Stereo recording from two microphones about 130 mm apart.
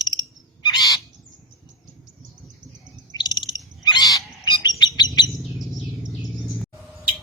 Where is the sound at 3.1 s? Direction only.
35° left (ahead or behind).